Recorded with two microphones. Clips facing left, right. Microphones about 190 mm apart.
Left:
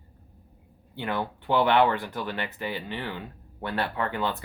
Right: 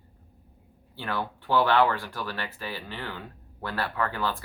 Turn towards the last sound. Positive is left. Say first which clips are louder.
# left 1 dB
turn(degrees=20)  # may be behind; listen again after turning